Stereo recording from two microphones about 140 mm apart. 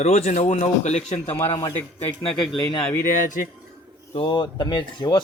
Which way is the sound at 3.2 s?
65° left (ahead or behind).